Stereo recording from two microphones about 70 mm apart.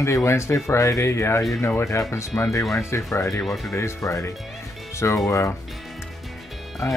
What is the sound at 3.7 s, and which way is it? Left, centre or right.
Speech, left.